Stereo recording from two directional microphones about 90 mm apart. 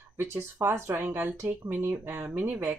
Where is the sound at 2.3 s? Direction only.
10° right (ahead or behind).